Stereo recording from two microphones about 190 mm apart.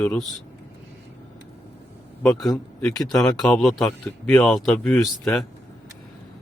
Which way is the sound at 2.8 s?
15° left (ahead or behind).